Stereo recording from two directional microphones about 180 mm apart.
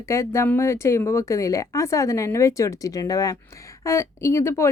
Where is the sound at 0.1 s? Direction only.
15° left (ahead or behind).